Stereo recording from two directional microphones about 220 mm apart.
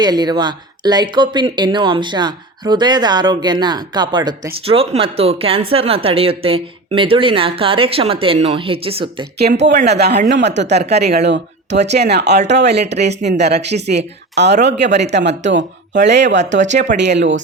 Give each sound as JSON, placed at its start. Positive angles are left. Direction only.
{"t": 0.0, "sound": "speech", "side_deg": -20}
{"t": 9.4, "sound": "speech", "side_deg": -50}